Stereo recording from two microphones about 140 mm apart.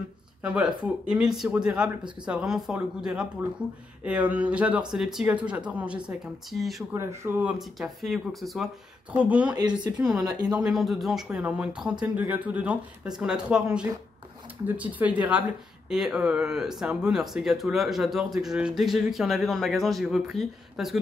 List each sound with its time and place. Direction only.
0.4 s speech: 5° right (ahead or behind)
6.9 s speech: 20° right (ahead or behind)
7.8 s speech: centre (ahead or behind)
9.6 s speech: 25° right (ahead or behind)
10.6 s speech: centre (ahead or behind)